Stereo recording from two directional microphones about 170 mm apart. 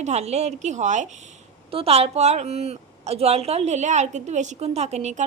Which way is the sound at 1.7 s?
35° right (ahead or behind).